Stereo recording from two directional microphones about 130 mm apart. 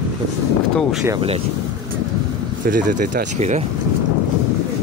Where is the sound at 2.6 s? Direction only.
90° right; by 3.6 s 65° right (ahead or behind).